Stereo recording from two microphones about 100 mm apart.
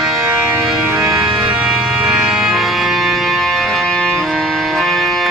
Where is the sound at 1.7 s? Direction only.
5° right (ahead or behind).